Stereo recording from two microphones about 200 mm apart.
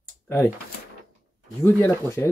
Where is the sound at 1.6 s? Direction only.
15° left (ahead or behind).